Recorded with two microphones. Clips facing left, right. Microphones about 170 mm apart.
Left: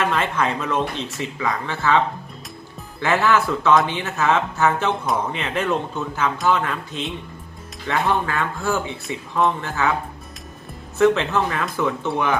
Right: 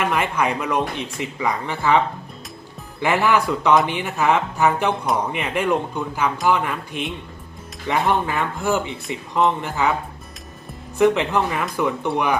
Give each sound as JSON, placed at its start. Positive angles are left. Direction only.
{"t": 0.0, "sound": "speech", "side_deg": -10}
{"t": 3.0, "sound": "speech", "side_deg": -15}
{"t": 10.9, "sound": "speech", "side_deg": -15}